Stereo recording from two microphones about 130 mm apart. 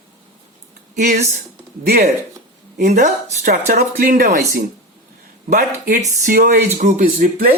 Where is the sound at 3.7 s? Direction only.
90° right.